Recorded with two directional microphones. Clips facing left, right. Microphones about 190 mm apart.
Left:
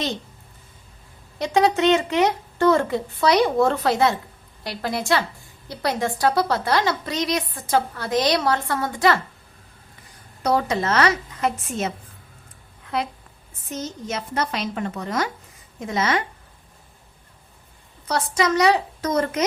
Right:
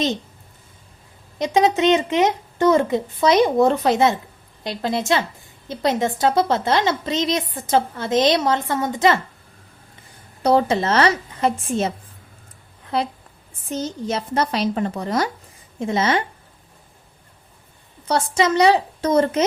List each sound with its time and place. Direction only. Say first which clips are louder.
1.4 s a woman's voice: right 1 dB; 20° right (ahead or behind)
10.4 s a woman's voice: right 4 dB; 30° right (ahead or behind)
18.1 s a woman's voice: right 3 dB; 25° right (ahead or behind)